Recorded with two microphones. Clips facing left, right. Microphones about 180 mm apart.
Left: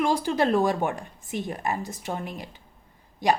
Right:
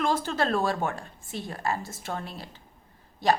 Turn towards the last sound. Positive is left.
turn(degrees=15)  # may be behind; listen again after turning